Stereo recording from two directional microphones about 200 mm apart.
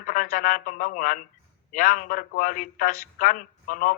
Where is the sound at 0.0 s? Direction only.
45° left (ahead or behind).